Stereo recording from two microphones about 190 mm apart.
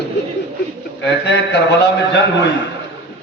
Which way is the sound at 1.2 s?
65° left (ahead or behind).